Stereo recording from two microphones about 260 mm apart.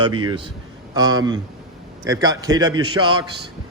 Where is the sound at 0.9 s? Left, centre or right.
Centre.